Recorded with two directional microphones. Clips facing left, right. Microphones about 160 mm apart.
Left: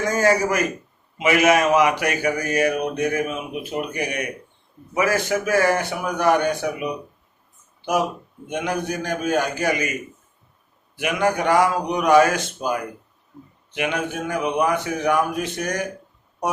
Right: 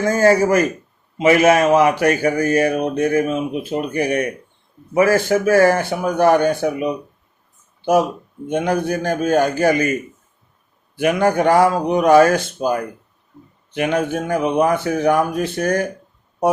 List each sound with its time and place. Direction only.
0.0 s a man's voice: 30° right (ahead or behind)
8.4 s speech: 30° right (ahead or behind)
13.7 s speech: 35° right (ahead or behind)